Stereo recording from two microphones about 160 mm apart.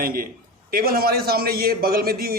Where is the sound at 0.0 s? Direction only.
65° right (ahead or behind).